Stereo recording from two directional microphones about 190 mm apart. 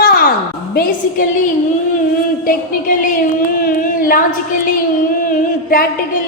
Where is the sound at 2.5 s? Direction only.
45° left (ahead or behind).